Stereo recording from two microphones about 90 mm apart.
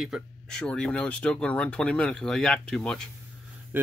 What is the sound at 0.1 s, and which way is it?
Speech, centre (ahead or behind).